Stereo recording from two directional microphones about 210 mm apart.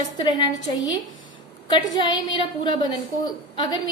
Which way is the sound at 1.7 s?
20° left (ahead or behind).